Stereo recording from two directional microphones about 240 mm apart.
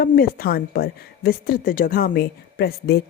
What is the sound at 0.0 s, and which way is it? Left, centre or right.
Speech, left.